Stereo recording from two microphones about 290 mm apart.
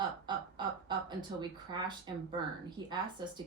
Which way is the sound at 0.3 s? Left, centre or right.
Centre.